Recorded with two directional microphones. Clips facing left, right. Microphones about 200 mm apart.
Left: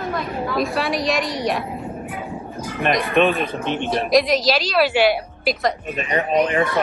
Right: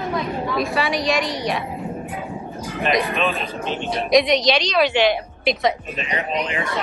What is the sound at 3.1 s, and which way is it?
Speech, 55° left (ahead or behind).